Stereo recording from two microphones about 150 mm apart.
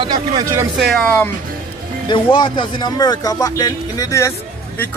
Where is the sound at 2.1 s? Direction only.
30° left (ahead or behind).